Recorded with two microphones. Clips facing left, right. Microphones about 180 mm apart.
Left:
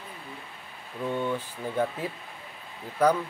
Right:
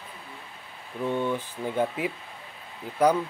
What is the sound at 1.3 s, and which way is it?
Speech, 15° right (ahead or behind).